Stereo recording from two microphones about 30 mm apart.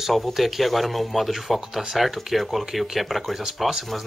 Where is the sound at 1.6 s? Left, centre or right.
Centre.